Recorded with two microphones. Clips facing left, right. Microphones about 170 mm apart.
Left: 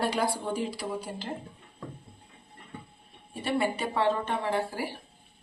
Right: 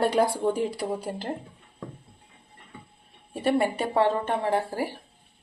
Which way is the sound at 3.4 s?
50° right (ahead or behind).